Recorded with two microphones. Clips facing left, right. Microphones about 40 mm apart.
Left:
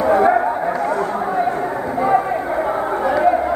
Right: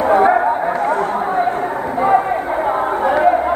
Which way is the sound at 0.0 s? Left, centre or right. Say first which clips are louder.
Right 2 dB; right.